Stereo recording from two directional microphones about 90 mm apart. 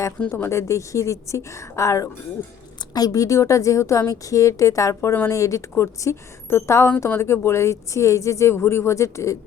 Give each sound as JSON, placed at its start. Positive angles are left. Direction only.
{"t": 0.2, "sound": "speech", "side_deg": 20}
{"t": 0.5, "sound": "speech", "side_deg": 35}
{"t": 4.9, "sound": "speech", "side_deg": 20}
{"t": 5.3, "sound": "speech", "side_deg": 35}